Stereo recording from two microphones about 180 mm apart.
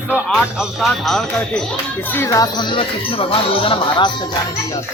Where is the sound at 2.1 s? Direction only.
15° left (ahead or behind).